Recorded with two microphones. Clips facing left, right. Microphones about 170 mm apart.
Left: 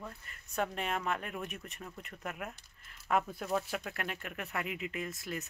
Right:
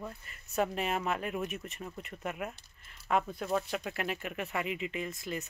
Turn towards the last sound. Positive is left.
turn(degrees=0)  # may be behind; listen again after turning